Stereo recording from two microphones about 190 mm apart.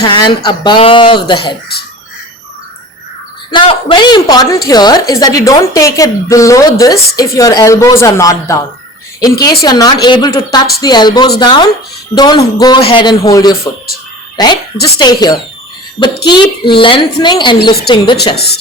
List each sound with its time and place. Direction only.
0.0 s a woman's voice: 25° left (ahead or behind)
3.5 s a woman's voice: 25° left (ahead or behind)
9.6 s a woman's voice: 20° left (ahead or behind)